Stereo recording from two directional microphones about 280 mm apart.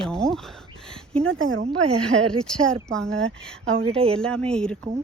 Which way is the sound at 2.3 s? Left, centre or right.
Centre.